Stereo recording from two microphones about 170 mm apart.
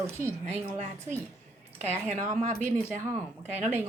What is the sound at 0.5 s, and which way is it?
Speech, 40° right (ahead or behind).